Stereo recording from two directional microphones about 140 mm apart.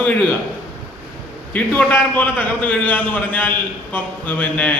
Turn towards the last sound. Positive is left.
turn(degrees=10)  # may be behind; listen again after turning